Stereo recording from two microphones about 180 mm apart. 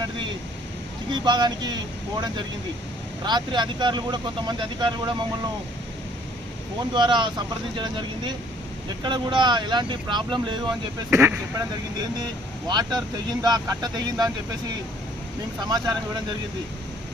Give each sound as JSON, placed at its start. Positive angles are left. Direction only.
{"t": 1.1, "sound": "speech", "side_deg": -25}
{"t": 3.2, "sound": "speech", "side_deg": -25}
{"t": 6.9, "sound": "speech", "side_deg": -25}
{"t": 11.1, "sound": "speech", "side_deg": -15}
{"t": 15.6, "sound": "speech", "side_deg": -25}